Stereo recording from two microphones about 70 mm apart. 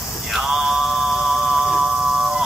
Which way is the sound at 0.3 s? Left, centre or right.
Centre.